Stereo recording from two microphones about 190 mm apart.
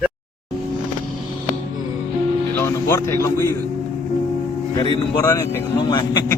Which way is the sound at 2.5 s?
15° left (ahead or behind).